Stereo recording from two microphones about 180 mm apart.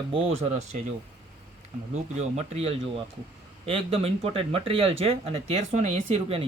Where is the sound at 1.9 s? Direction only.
35° right (ahead or behind).